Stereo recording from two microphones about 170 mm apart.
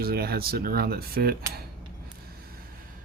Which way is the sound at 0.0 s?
65° right (ahead or behind).